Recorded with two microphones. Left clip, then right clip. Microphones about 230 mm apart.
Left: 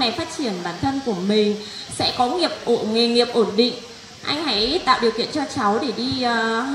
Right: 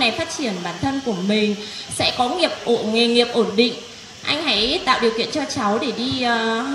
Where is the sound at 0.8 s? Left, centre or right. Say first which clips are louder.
Even; right.